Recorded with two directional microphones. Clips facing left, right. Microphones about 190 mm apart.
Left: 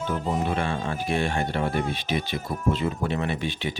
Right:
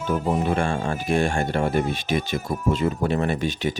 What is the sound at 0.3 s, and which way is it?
Speech, 45° right (ahead or behind).